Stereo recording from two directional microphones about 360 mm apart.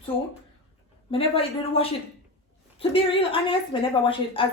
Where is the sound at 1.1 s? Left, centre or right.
Centre.